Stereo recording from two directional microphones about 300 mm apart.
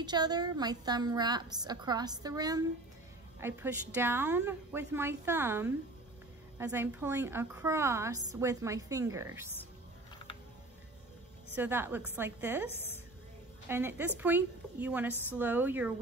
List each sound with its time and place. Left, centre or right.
0.0 s a woman's voice: centre
11.5 s a woman's voice: centre
13.7 s a woman's voice: centre